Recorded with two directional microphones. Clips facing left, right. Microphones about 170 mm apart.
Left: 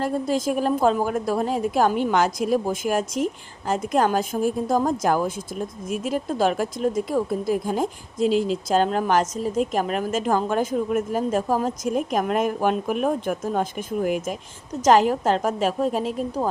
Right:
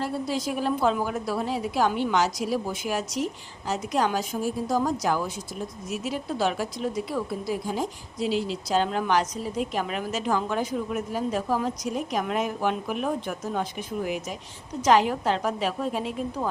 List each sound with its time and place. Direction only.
0.0 s a woman's voice: 50° left (ahead or behind)